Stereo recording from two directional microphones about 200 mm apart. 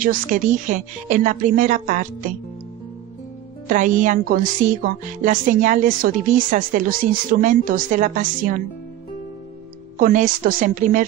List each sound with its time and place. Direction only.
0.0 s a woman's voice: 45° right (ahead or behind)
3.6 s a woman's voice: 40° right (ahead or behind)
9.9 s a woman's voice: 40° right (ahead or behind)